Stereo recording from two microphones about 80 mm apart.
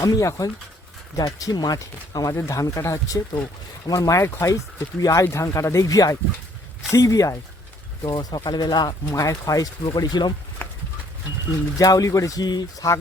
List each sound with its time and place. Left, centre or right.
0.0 s speech: left
2.3 s speech: left
4.2 s speech: left
4.9 s speech: left
8.0 s speech: left
9.1 s speech: left
9.8 s speech: left
11.8 s speech: left
12.4 s speech: left